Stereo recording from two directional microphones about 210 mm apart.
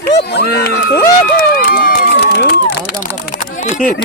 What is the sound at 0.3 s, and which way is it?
Speech, 50° left (ahead or behind).